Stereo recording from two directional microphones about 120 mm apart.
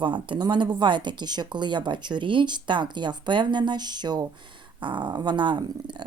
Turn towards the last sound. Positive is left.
turn(degrees=-40)  # may be behind; listen again after turning